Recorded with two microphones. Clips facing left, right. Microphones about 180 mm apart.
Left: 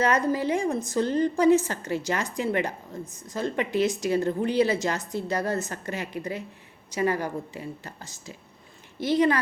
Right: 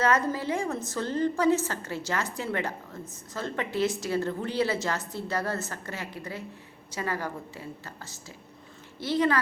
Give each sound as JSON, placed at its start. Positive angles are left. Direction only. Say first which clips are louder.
{"t": 0.0, "sound": "a woman's voice", "louder": "left 2 dB", "side_deg": 15}